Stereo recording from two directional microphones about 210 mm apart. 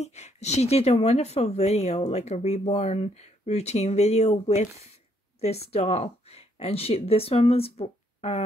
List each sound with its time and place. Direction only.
0.0 s speech: 30° left (ahead or behind)